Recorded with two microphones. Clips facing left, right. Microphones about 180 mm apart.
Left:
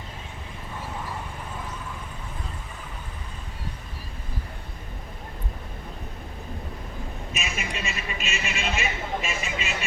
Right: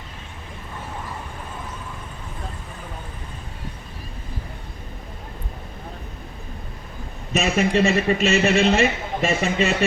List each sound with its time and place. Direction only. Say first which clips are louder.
7.3 s a man's voice: right 16 dB; 65° right (ahead or behind)